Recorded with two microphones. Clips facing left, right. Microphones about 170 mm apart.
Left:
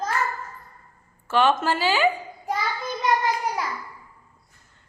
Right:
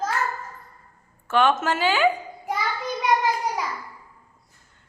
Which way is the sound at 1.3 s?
Centre (ahead or behind).